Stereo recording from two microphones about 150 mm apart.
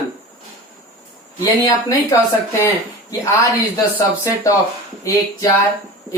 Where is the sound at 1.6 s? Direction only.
25° left (ahead or behind).